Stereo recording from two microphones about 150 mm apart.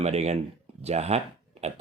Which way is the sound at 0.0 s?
45° right (ahead or behind).